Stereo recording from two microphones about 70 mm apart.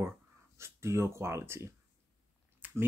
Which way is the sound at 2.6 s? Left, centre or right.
Right.